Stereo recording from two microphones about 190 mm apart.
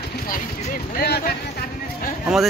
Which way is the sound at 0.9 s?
50° left (ahead or behind).